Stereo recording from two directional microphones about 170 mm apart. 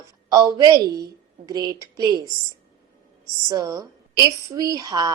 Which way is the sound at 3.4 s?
20° right (ahead or behind).